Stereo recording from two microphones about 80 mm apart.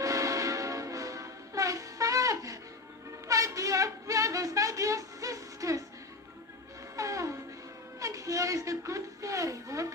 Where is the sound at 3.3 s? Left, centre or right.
Right.